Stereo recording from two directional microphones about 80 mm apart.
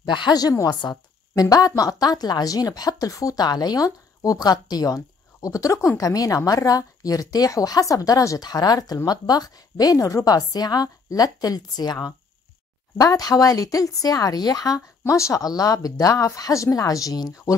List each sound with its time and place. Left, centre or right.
0.0 s a woman's voice: left
0.3 s a woman's voice: left
12.9 s a woman's voice: left
15.4 s a woman's voice: left